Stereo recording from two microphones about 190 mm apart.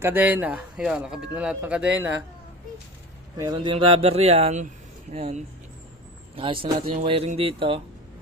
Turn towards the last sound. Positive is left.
turn(degrees=-30)  # may be behind; listen again after turning